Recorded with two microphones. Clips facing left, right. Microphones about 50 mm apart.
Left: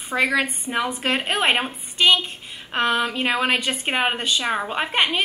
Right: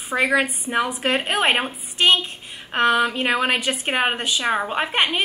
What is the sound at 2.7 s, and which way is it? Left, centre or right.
A woman's voice, centre.